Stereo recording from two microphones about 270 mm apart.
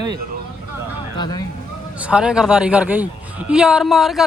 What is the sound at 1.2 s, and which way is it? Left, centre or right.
Speech, centre.